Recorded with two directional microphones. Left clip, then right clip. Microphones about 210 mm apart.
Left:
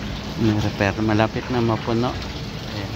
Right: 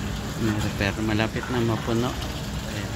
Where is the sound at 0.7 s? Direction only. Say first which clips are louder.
Left 6 dB; 20° left (ahead or behind).